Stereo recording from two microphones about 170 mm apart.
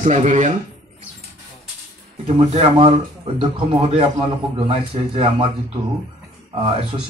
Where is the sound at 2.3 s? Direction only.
35° right (ahead or behind).